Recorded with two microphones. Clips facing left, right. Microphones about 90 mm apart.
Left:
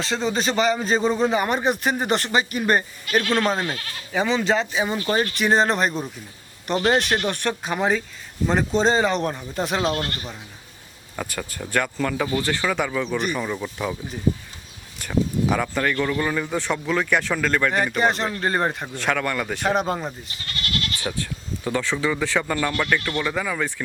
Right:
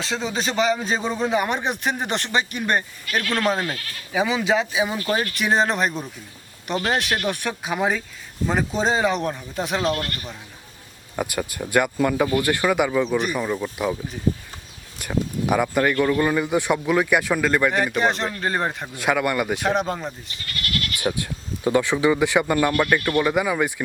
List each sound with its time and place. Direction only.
0.0 s a man's voice: centre (ahead or behind)
3.1 s speech: 25° left (ahead or behind)
4.1 s a man's voice: 5° right (ahead or behind)
9.8 s speech: 25° left (ahead or behind)
11.2 s speech: 10° right (ahead or behind)
13.1 s a man's voice: centre (ahead or behind)
20.4 s goat: 25° left (ahead or behind)
21.0 s speech: 15° right (ahead or behind)